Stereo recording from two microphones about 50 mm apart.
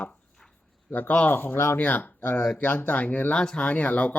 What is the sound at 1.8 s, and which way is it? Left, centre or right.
Speech, left.